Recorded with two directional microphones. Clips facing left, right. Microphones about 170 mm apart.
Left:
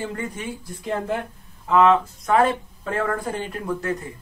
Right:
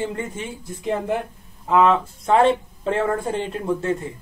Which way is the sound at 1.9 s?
30° right (ahead or behind).